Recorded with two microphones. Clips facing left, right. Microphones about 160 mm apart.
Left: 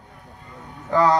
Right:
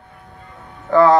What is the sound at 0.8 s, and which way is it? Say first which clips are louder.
Speech: right 6 dB; 40° right (ahead or behind).